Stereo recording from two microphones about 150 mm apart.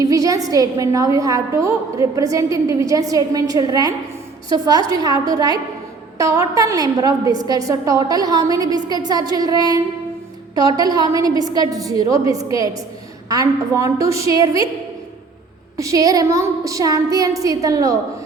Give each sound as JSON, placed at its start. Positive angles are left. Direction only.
{"t": 0.0, "sound": "a woman's voice", "side_deg": -20}
{"t": 15.8, "sound": "a woman's voice", "side_deg": -20}